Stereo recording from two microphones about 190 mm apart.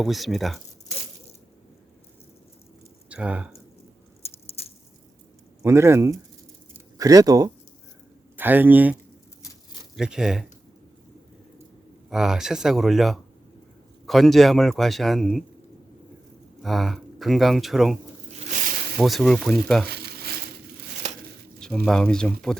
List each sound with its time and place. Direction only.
0.0 s a man's voice: centre (ahead or behind)
3.1 s speech: 5° right (ahead or behind)
4.2 s biting: 30° left (ahead or behind)
5.6 s a man's voice: 15° right (ahead or behind)
12.1 s a man's voice: 5° right (ahead or behind)
16.6 s a man's voice: centre (ahead or behind)
18.5 s a sound: 45° right (ahead or behind)
18.9 s a man's voice: centre (ahead or behind)
19.9 s frying: 55° right (ahead or behind)
21.6 s a man's voice: 5° left (ahead or behind)